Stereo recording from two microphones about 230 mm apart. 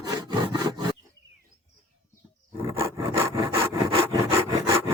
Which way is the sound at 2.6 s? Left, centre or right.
Centre.